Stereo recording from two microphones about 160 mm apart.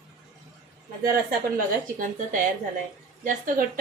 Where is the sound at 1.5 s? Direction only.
55° right (ahead or behind).